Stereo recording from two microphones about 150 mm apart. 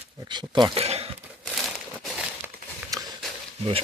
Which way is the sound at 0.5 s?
35° right (ahead or behind).